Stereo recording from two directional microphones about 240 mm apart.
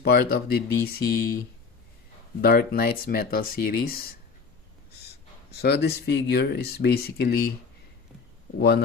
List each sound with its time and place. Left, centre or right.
0.0 s speech: left
2.4 s speech: left
5.5 s speech: left
8.5 s speech: left